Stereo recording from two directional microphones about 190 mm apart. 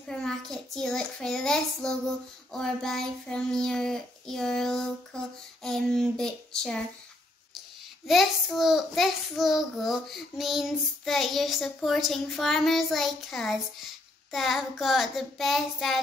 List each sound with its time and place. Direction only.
0.0 s child singing: 5° left (ahead or behind)
8.1 s child singing: centre (ahead or behind)